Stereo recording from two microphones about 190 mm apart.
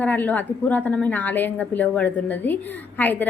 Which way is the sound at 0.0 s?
10° left (ahead or behind).